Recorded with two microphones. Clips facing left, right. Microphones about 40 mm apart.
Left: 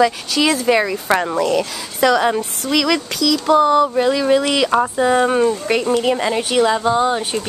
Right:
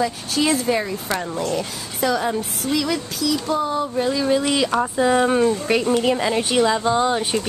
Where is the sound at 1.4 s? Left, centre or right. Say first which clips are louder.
Left 6 dB; left.